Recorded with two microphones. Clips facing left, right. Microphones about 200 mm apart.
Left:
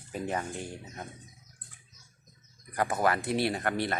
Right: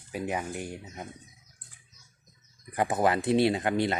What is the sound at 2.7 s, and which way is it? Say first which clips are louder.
Speech: right 2 dB; 20° right (ahead or behind).